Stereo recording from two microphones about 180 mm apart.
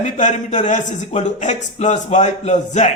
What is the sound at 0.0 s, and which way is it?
Speech, 40° left (ahead or behind).